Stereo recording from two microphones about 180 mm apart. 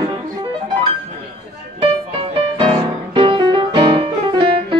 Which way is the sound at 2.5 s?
30° right (ahead or behind).